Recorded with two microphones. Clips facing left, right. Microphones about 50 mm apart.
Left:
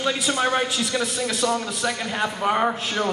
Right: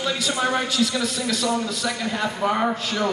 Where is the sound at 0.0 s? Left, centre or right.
Centre.